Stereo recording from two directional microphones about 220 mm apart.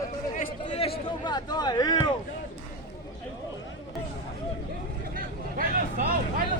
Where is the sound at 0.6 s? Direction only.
25° left (ahead or behind).